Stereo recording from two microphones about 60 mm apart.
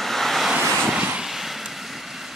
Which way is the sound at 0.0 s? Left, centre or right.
Centre.